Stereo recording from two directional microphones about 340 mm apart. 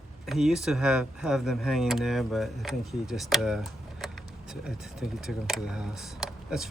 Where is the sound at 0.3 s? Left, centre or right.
Centre.